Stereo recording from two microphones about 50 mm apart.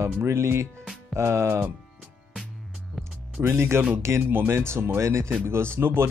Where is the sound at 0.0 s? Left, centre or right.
Right.